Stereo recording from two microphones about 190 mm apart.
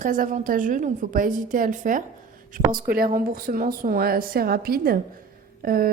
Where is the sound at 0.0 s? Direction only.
45° right (ahead or behind).